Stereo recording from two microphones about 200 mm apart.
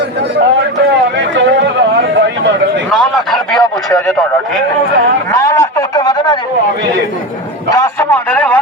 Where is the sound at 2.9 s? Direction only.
Centre (ahead or behind).